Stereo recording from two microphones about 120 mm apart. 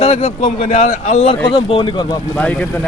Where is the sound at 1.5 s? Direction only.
45° left (ahead or behind).